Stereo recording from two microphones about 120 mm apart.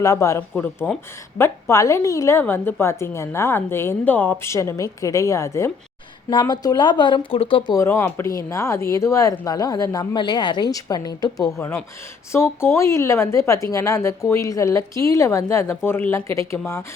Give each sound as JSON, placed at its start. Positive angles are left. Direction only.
{"t": 0.0, "sound": "speech", "side_deg": 25}
{"t": 6.4, "sound": "speech", "side_deg": 35}
{"t": 7.7, "sound": "speech", "side_deg": 25}